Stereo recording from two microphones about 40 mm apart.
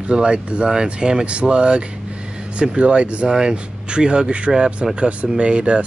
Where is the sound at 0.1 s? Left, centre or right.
Right.